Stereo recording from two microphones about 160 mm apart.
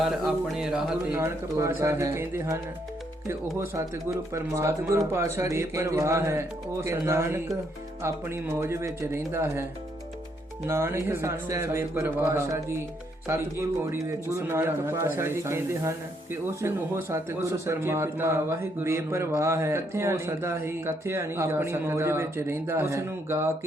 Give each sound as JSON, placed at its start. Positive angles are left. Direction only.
{"t": 0.0, "sound": "speech", "side_deg": 0}
{"t": 1.2, "sound": "a man's voice", "side_deg": -20}
{"t": 4.4, "sound": "a man's voice", "side_deg": -20}
{"t": 10.7, "sound": "a man's voice", "side_deg": -15}